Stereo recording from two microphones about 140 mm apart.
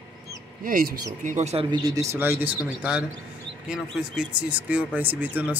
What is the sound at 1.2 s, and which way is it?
Speech, 55° right (ahead or behind).